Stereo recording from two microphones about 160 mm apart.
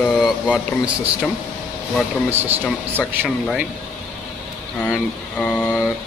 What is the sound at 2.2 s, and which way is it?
Speech, 15° right (ahead or behind).